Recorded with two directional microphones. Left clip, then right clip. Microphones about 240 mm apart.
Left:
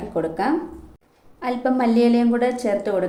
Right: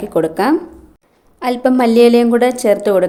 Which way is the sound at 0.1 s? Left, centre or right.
Right.